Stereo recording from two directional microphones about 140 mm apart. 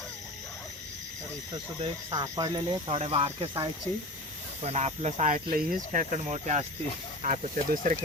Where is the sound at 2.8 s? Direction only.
45° right (ahead or behind).